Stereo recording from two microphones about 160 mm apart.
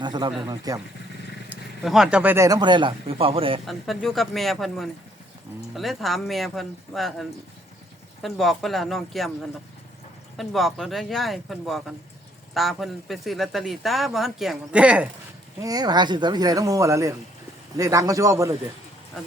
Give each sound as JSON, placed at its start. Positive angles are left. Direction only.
{"t": 0.0, "sound": "speech", "side_deg": -25}
{"t": 1.5, "sound": "speech", "side_deg": 0}
{"t": 3.7, "sound": "speech", "side_deg": 0}
{"t": 10.3, "sound": "speech", "side_deg": 0}
{"t": 15.6, "sound": "speech", "side_deg": -25}